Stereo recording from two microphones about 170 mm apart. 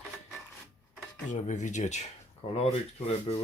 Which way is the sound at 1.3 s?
45° left (ahead or behind).